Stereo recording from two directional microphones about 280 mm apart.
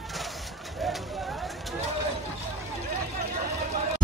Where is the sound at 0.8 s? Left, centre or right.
Centre.